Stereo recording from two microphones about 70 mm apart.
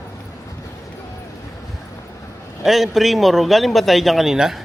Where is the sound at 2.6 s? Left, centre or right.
Centre.